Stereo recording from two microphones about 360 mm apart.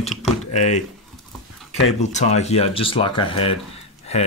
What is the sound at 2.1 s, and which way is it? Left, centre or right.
Speech, centre.